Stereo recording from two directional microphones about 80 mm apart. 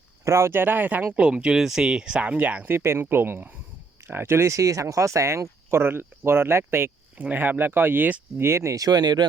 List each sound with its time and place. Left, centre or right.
0.3 s speech: right
8.4 s speech: right